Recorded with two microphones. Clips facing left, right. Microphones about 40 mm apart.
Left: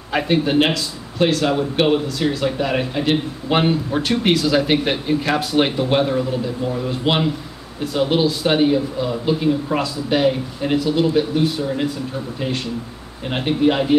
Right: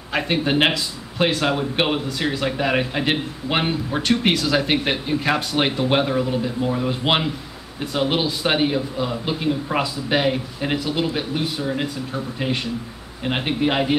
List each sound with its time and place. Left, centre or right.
0.5 s a man's voice: centre
3.5 s a man's voice: centre
13.2 s a man's voice: centre